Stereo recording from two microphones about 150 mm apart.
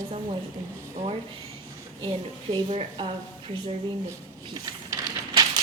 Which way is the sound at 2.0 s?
35° right (ahead or behind).